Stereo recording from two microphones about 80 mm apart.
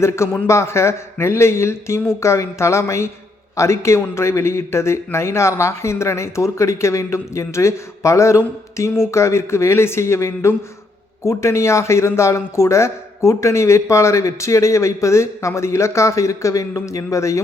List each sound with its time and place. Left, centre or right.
0.4 s speech: left